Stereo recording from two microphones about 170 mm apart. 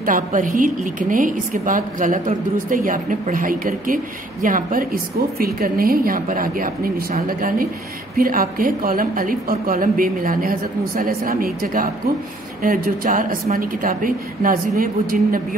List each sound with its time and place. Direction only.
0.0 s a woman's voice: 50° right (ahead or behind)